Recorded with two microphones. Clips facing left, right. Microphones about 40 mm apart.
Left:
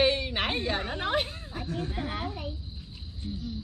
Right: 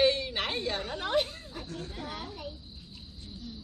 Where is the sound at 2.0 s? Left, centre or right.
Left.